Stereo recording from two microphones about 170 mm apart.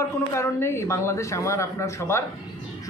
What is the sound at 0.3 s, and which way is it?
A man's voice, 15° left (ahead or behind).